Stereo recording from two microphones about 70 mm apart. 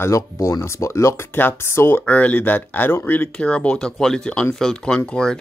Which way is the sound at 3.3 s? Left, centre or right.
Centre.